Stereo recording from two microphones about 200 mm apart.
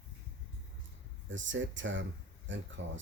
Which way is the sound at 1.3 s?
70° right (ahead or behind).